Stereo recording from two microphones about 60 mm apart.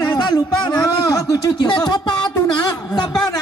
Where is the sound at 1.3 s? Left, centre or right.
Left.